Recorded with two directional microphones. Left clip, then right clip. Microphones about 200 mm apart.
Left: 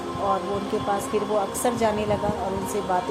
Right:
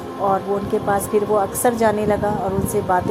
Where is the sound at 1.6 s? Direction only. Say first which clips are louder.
Right 6 dB; 30° right (ahead or behind).